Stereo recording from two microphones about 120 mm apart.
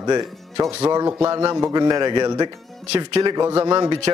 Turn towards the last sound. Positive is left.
turn(degrees=-35)  # may be behind; listen again after turning